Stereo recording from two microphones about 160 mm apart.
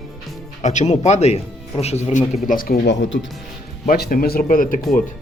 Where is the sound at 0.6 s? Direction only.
50° left (ahead or behind).